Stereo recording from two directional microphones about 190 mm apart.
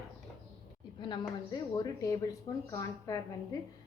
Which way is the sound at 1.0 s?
25° left (ahead or behind).